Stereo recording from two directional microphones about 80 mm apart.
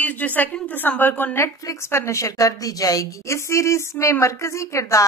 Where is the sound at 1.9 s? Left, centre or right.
Left.